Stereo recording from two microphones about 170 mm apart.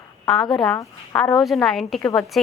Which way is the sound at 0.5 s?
Centre (ahead or behind).